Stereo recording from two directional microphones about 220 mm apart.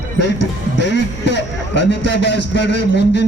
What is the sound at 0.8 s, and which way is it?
A man's voice, 55° left (ahead or behind).